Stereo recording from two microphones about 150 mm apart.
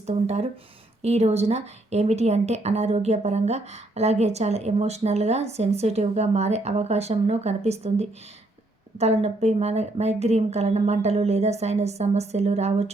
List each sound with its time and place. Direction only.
0.0 s speech: 50° right (ahead or behind)